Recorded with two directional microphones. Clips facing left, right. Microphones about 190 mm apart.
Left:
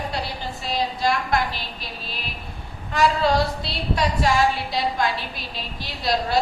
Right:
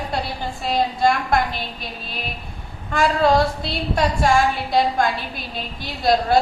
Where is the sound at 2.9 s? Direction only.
50° right (ahead or behind).